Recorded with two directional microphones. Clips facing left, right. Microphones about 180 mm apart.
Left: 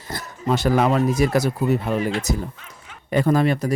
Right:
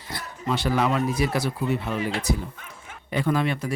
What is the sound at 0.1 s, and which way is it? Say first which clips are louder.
Speech: left 5 dB; 45° left (ahead or behind).